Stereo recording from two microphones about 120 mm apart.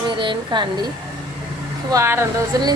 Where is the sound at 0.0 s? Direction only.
40° right (ahead or behind).